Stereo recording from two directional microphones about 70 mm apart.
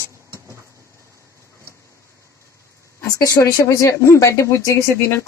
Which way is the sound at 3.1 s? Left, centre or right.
Left.